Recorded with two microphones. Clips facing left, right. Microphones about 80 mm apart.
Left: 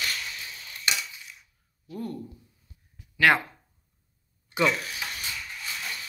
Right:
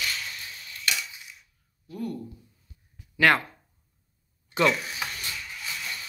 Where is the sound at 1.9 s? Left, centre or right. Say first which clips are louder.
Right 1 dB; left.